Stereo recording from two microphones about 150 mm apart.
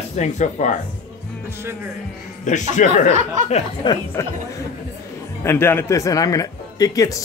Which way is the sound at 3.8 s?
30° left (ahead or behind).